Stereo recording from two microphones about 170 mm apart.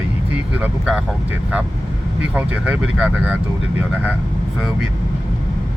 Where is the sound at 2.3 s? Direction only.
10° right (ahead or behind).